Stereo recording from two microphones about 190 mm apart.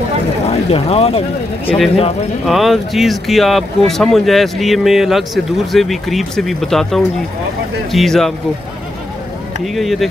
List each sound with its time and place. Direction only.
0.5 s speech: 30° left (ahead or behind)
2.4 s speech: centre (ahead or behind)
9.8 s speech: centre (ahead or behind)